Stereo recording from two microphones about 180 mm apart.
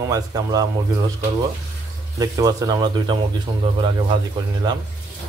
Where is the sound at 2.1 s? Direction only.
20° right (ahead or behind).